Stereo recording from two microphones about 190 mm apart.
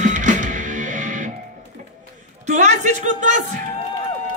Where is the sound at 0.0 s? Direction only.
40° right (ahead or behind).